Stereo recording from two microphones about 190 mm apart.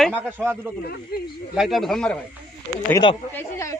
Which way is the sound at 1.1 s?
55° left (ahead or behind).